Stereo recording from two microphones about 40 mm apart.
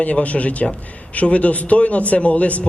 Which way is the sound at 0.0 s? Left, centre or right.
Left.